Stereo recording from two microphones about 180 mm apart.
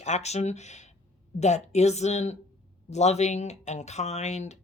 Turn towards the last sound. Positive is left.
turn(degrees=40)  # may be behind; listen again after turning